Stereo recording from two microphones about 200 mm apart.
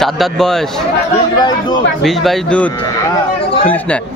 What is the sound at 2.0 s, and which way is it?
Speech, centre (ahead or behind).